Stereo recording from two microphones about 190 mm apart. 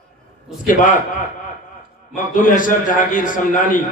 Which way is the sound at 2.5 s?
45° left (ahead or behind).